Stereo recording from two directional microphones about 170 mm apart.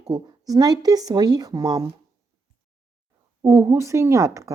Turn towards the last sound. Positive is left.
turn(degrees=-20)  # may be behind; listen again after turning